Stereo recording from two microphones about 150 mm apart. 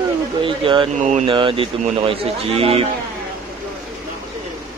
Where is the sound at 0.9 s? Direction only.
50° right (ahead or behind).